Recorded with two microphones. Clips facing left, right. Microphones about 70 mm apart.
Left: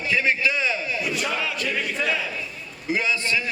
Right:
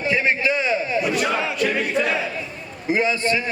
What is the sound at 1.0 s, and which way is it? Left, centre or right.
Chant, right.